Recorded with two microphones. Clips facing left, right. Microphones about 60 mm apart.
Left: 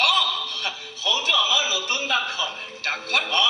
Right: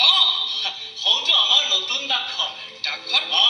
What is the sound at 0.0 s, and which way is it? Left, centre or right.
Music, left.